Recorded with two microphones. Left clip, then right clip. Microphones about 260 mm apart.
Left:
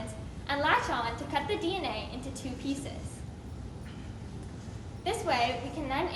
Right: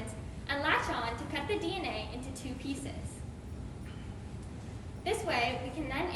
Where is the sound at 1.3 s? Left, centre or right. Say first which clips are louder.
Left 5 dB; centre.